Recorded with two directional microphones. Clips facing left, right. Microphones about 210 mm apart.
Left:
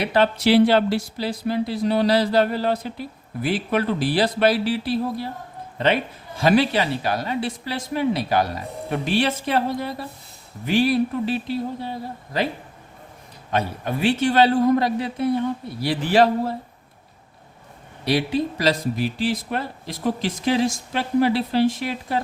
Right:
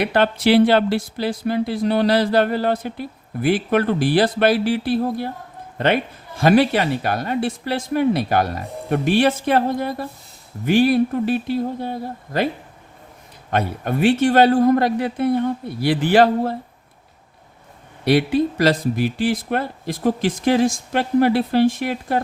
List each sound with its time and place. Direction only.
0.0 s a man's voice: 55° right (ahead or behind)
13.5 s speech: 55° right (ahead or behind)
18.0 s speech: 55° right (ahead or behind)